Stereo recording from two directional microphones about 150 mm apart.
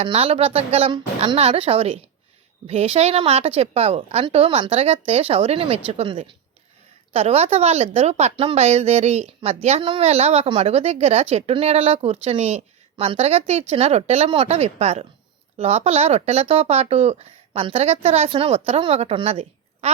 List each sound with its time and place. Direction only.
0.0 s a woman's voice: 40° right (ahead or behind)